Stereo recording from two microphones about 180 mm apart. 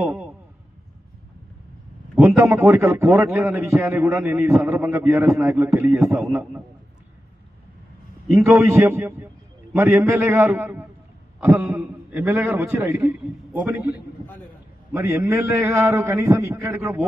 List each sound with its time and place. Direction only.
0.0 s a sound: 10° right (ahead or behind)
2.1 s a man's voice: 15° right (ahead or behind)
8.5 s a man's voice: 15° right (ahead or behind)